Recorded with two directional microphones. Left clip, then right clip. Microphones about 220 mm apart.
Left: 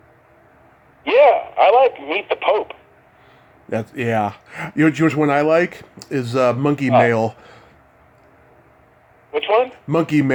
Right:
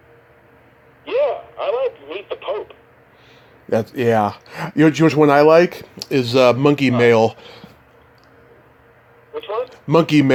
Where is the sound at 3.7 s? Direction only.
5° right (ahead or behind).